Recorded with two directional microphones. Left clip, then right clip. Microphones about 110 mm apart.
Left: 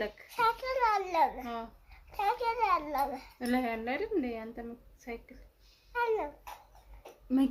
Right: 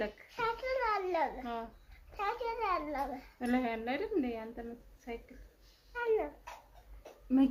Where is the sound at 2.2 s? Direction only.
50° left (ahead or behind).